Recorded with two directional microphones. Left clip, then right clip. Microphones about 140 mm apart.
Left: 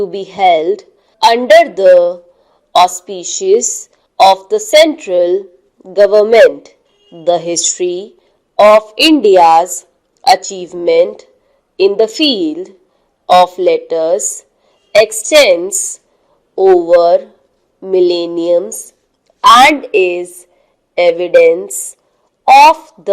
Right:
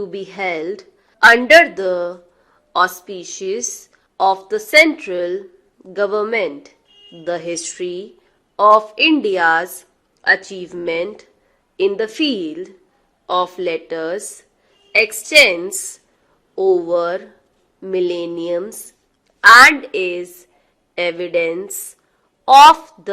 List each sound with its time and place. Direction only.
0.0 s a woman's voice: 20° left (ahead or behind)